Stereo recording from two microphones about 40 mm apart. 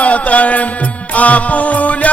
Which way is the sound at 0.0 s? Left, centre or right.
Left.